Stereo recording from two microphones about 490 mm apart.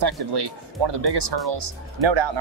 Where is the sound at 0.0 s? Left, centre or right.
Right.